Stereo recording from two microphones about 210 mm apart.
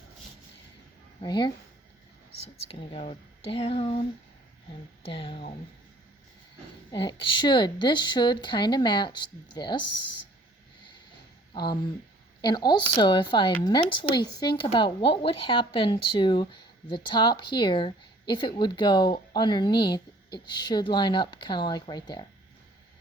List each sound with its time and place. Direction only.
1.2 s speech: 20° left (ahead or behind)
2.6 s speech: 30° left (ahead or behind)
5.0 s speech: 25° left (ahead or behind)
6.9 s speech: 25° left (ahead or behind)
11.5 s speech: 20° left (ahead or behind)